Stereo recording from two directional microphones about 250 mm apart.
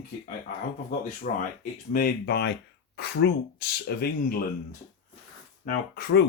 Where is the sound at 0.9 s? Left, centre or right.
Left.